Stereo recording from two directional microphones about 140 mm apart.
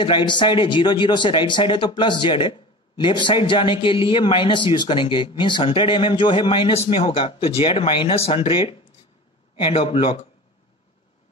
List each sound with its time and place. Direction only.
0.0 s a man's voice: 35° left (ahead or behind)